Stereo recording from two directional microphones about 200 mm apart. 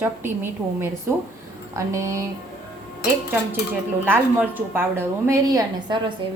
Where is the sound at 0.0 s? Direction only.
10° right (ahead or behind).